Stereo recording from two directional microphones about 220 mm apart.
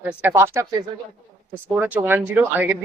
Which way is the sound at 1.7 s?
10° right (ahead or behind).